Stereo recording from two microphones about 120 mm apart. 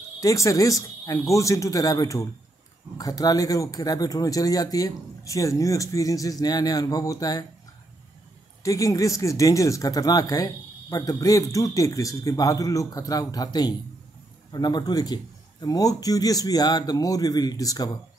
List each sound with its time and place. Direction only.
0.2 s speech: 30° left (ahead or behind)
8.6 s speech: 30° left (ahead or behind)